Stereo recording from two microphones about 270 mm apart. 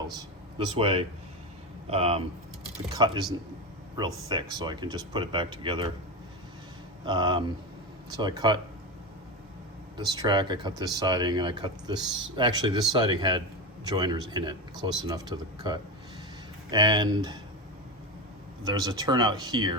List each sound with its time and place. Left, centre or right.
0.2 s speech: centre
4.3 s speech: centre
7.0 s speech: centre
10.0 s speech: centre
18.6 s speech: centre